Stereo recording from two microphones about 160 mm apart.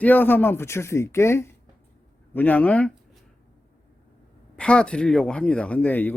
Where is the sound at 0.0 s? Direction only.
10° left (ahead or behind).